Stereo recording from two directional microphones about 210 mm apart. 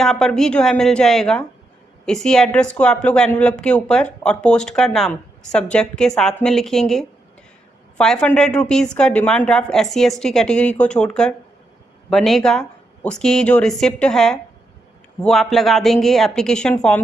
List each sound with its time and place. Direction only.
0.0 s speech: centre (ahead or behind)